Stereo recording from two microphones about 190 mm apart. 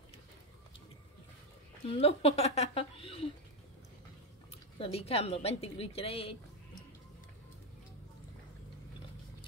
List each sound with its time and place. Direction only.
1.9 s a woman's voice: 30° left (ahead or behind)
4.7 s a woman's voice: 30° left (ahead or behind)